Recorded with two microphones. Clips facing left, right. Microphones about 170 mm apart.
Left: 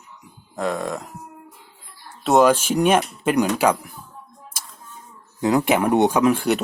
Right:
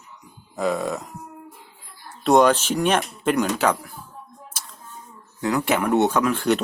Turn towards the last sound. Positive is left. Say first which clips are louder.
# left 2 dB
turn(degrees=10)  # may be behind; listen again after turning